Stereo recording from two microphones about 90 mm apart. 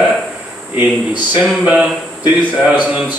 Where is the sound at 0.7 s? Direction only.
20° right (ahead or behind).